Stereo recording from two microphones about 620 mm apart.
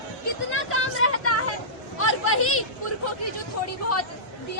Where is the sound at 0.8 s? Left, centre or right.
Centre.